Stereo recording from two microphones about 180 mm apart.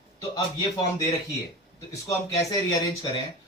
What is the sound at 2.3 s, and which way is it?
Speech, 20° left (ahead or behind).